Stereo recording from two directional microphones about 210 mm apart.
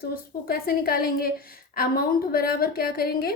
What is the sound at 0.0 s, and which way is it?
A woman's voice, 45° left (ahead or behind).